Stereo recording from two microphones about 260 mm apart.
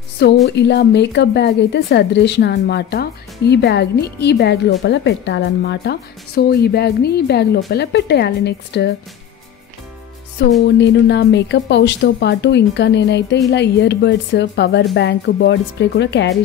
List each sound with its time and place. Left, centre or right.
0.6 s speech: left
10.4 s music: left
10.8 s speech: left